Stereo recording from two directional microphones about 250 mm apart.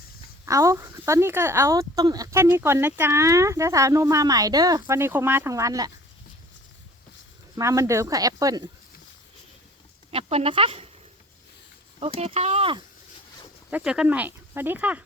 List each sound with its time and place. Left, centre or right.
0.4 s speech: centre
7.5 s speech: centre
10.1 s speech: right
11.9 s speech: right
13.7 s speech: centre